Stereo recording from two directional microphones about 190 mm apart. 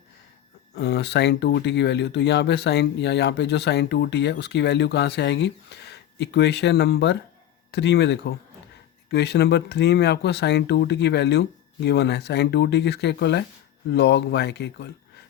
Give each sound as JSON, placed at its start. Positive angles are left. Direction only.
{"t": 0.7, "sound": "speech", "side_deg": 60}